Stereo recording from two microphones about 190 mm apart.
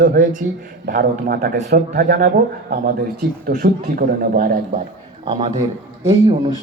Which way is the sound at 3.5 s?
55° right (ahead or behind).